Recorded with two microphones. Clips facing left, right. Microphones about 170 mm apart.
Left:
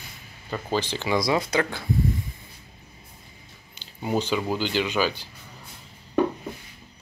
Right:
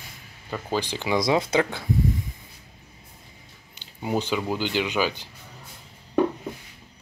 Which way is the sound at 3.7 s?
15° right (ahead or behind).